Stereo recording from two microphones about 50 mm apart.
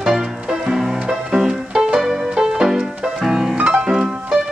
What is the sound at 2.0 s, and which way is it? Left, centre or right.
Music, centre.